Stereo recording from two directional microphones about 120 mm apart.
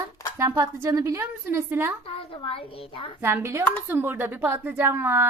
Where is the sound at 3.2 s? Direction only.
20° right (ahead or behind).